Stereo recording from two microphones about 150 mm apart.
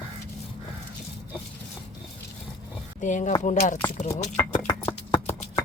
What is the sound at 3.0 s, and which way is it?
Speech, 55° left (ahead or behind).